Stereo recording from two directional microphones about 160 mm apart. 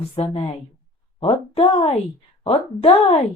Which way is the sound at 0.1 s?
40° left (ahead or behind).